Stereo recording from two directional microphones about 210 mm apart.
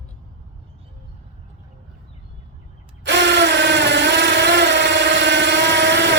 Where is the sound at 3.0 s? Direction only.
55° right (ahead or behind).